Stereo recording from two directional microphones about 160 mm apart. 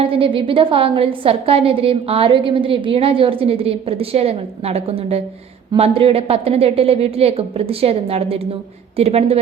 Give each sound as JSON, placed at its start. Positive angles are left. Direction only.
{"t": 0.0, "sound": "a woman's voice", "side_deg": -35}